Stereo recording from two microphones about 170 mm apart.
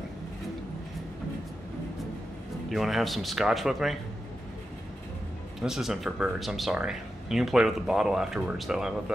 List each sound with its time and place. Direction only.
2.7 s speech: centre (ahead or behind)
5.6 s speech: centre (ahead or behind)